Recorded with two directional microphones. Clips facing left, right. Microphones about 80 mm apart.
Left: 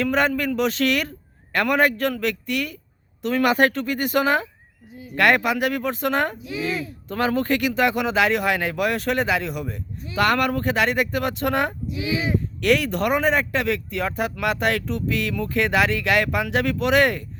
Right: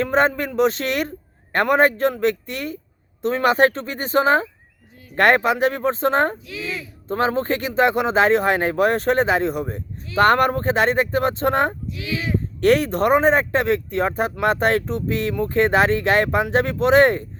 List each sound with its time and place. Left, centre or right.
0.0 s speech: right
6.4 s speech: centre
7.1 s speech: right
11.9 s speech: centre
12.5 s speech: right